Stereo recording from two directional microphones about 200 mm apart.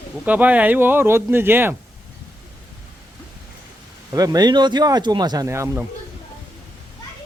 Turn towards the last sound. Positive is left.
turn(degrees=-15)  # may be behind; listen again after turning